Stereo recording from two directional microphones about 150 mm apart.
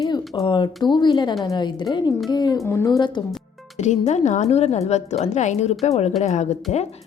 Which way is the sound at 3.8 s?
50° left (ahead or behind).